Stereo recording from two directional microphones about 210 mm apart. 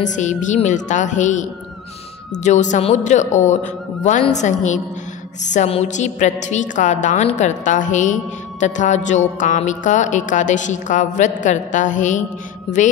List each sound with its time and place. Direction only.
0.0 s a woman's voice: 35° left (ahead or behind)